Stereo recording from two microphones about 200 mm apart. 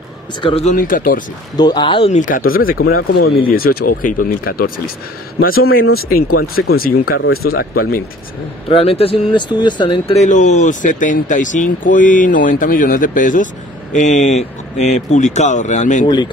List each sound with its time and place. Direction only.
0.4 s a man's voice: 25° left (ahead or behind)
0.7 s speech: 45° left (ahead or behind)
1.6 s speech: 20° left (ahead or behind); by 4.8 s 45° left (ahead or behind)
6.3 s speech: 50° left (ahead or behind)
8.6 s speech: 30° left (ahead or behind)